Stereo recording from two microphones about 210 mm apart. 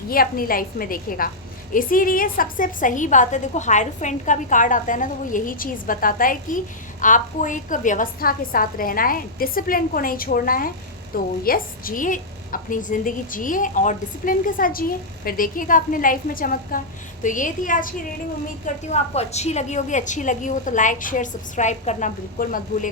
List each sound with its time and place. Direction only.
0.1 s a woman's voice: 45° left (ahead or behind)